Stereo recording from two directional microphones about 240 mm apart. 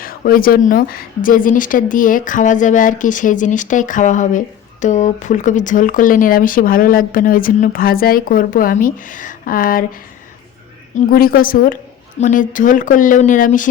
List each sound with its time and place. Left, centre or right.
0.0 s a woman's voice: left
10.9 s a woman's voice: left